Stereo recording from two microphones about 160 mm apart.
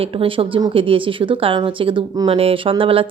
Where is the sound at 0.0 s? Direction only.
35° right (ahead or behind).